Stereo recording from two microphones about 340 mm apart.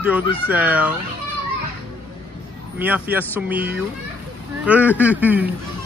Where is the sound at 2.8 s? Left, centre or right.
Centre.